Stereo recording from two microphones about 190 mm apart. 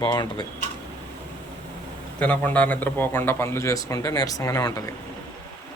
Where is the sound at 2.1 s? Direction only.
5° left (ahead or behind).